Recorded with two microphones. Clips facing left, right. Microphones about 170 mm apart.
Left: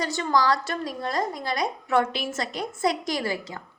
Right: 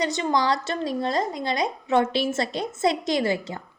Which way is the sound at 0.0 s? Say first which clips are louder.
Right 1 dB; 20° right (ahead or behind).